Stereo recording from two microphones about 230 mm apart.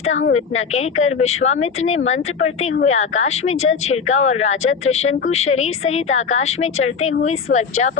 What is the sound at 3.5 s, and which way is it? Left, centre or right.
Speech, left.